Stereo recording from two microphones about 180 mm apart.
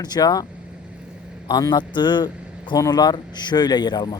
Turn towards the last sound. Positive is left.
turn(degrees=25)  # may be behind; listen again after turning